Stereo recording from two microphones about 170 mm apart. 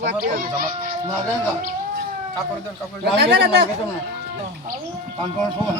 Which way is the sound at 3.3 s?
75° right (ahead or behind).